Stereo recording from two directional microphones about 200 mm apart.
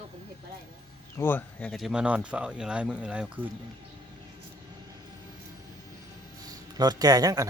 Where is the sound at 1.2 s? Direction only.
10° left (ahead or behind); by 3.5 s 5° right (ahead or behind).